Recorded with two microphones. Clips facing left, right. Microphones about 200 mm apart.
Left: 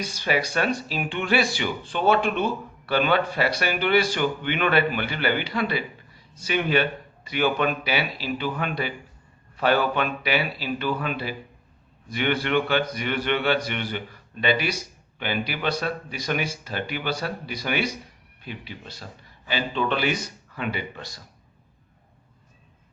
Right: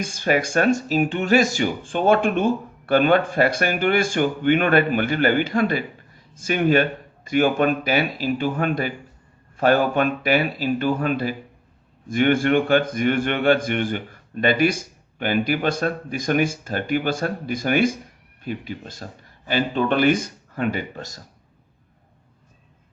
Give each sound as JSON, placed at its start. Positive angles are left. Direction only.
{"t": 0.0, "sound": "a man's voice", "side_deg": -50}